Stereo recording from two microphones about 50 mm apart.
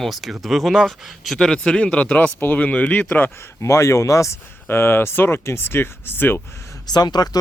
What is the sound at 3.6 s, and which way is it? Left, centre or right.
Speech, left.